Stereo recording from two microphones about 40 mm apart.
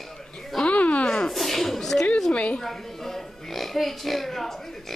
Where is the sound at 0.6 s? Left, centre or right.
Left.